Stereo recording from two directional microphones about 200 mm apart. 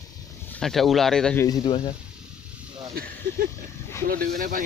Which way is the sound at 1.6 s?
25° left (ahead or behind).